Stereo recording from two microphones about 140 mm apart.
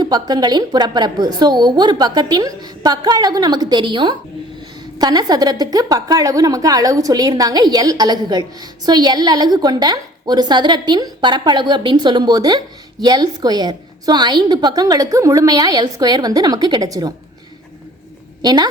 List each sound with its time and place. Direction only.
0.0 s a woman's voice: 30° right (ahead or behind)
18.4 s a woman's voice: 30° right (ahead or behind)